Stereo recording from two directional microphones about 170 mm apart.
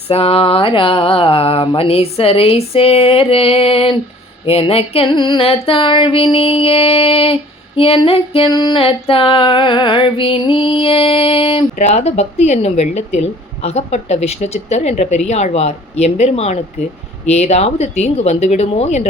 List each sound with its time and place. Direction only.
0.1 s music: 35° left (ahead or behind)